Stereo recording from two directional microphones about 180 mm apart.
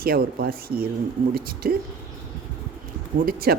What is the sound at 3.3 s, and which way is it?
Speech, 55° right (ahead or behind).